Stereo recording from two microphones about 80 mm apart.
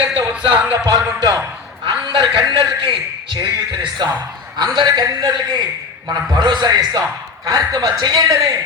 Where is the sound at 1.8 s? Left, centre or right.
Right.